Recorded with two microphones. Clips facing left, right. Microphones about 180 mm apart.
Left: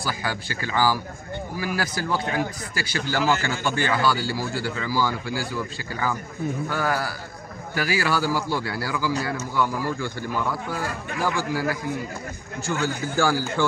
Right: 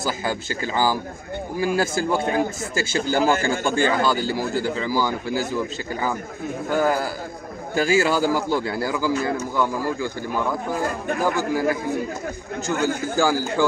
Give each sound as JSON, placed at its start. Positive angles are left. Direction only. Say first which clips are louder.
{"t": 0.0, "sound": "speech", "louder": "right 4 dB", "side_deg": -20}
{"t": 3.2, "sound": "speech", "louder": "right 3 dB", "side_deg": -50}
{"t": 3.6, "sound": "speech", "louder": "right 2 dB", "side_deg": -20}
{"t": 11.1, "sound": "speech", "louder": "right 3 dB", "side_deg": -50}
{"t": 11.5, "sound": "speech", "louder": "right 4 dB", "side_deg": -20}
{"t": 12.8, "sound": "speech", "louder": "right 2 dB", "side_deg": -15}